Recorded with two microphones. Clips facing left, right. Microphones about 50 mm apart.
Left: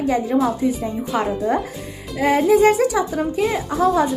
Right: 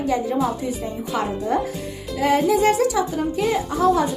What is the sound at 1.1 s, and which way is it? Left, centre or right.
Speech, centre.